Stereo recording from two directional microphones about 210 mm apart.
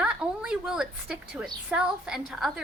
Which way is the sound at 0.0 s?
5° right (ahead or behind).